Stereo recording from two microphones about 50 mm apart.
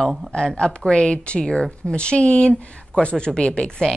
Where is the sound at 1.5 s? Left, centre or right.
Centre.